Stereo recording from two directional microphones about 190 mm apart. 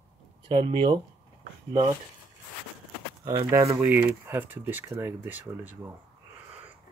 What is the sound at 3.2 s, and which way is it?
Speech, 25° right (ahead or behind).